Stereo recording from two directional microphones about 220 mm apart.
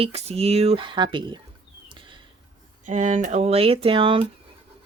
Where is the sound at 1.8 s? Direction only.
20° right (ahead or behind).